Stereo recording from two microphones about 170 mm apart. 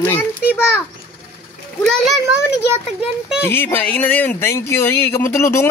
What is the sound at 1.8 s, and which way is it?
A child's voice, 5° left (ahead or behind).